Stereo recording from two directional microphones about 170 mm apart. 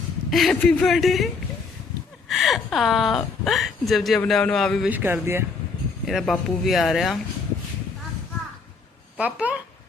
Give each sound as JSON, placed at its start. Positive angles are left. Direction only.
{"t": 0.3, "sound": "speech", "side_deg": 0}
{"t": 2.3, "sound": "speech", "side_deg": 0}
{"t": 4.9, "sound": "speech", "side_deg": -10}
{"t": 6.1, "sound": "speech", "side_deg": 0}
{"t": 9.1, "sound": "speech", "side_deg": -10}